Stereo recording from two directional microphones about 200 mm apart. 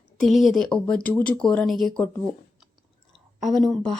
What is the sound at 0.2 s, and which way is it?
A woman's voice, centre (ahead or behind).